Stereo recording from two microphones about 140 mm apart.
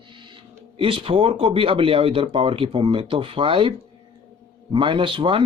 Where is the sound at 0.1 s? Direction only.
35° right (ahead or behind).